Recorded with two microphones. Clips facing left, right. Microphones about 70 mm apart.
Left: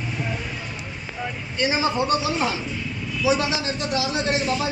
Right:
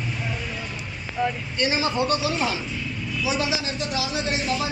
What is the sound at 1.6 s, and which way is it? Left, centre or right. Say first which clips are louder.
Speech: left 1 dB; left.